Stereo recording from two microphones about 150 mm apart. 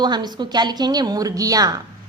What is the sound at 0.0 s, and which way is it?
A woman's voice, 30° right (ahead or behind).